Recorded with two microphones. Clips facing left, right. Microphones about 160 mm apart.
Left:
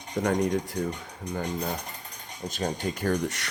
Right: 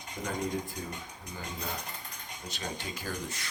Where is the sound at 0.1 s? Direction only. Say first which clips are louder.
Left 9 dB; 70° left (ahead or behind).